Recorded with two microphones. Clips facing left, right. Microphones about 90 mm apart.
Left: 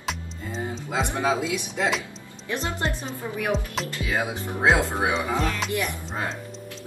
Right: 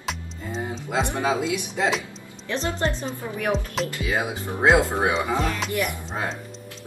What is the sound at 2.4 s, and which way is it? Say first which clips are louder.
Speech: right 2 dB; 15° left (ahead or behind).